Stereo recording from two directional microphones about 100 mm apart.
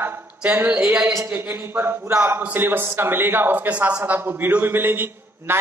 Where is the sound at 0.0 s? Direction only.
20° right (ahead or behind).